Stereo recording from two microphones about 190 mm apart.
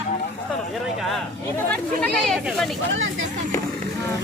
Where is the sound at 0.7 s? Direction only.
Centre (ahead or behind).